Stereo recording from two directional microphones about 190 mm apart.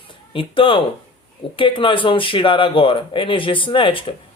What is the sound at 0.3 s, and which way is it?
Speech, 25° left (ahead or behind).